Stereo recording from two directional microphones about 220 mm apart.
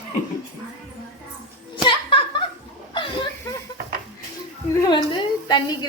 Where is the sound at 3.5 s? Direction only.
15° left (ahead or behind).